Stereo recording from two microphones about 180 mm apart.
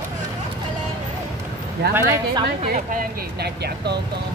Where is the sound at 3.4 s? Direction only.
65° right (ahead or behind).